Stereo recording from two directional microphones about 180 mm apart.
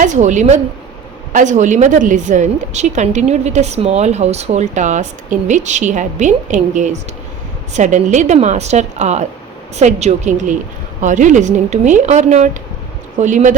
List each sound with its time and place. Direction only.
0.0 s a woman's voice: 40° right (ahead or behind)